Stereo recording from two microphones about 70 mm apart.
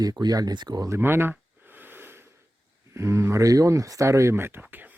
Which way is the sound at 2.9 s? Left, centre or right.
Right.